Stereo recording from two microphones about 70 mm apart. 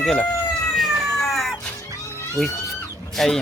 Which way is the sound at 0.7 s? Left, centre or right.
Centre.